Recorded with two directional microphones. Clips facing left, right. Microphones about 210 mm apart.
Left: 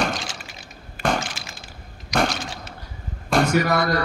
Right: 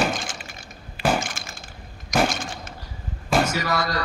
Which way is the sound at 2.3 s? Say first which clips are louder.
Even; 50° right (ahead or behind).